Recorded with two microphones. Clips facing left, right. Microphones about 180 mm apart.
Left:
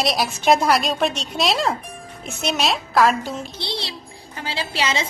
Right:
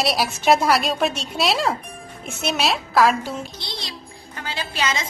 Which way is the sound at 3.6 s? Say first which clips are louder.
Left 5 dB; 25° left (ahead or behind).